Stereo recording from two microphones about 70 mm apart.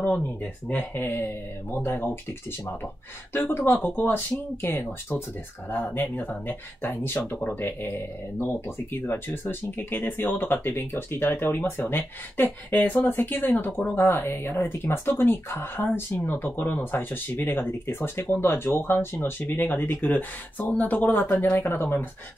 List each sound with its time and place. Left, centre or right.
0.1 s speech: centre
1.0 s speech: left
3.3 s speech: left